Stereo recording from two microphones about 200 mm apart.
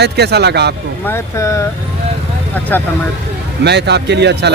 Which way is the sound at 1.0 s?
15° left (ahead or behind).